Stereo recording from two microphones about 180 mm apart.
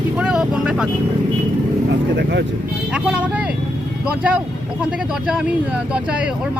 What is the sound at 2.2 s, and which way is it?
Speech, 70° right (ahead or behind).